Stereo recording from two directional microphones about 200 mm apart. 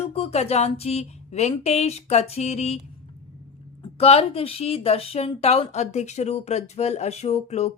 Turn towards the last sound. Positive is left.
turn(degrees=35)  # may be behind; listen again after turning